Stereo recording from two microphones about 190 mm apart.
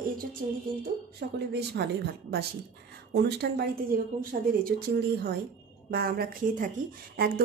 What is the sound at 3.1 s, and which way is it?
Speech, 60° right (ahead or behind).